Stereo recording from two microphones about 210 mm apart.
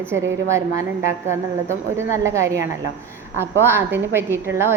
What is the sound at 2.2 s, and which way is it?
Speech, 15° right (ahead or behind).